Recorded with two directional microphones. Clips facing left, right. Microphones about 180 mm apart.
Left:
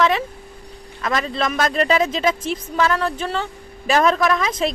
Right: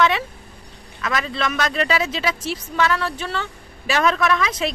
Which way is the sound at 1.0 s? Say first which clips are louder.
Left 2 dB; 35° left (ahead or behind).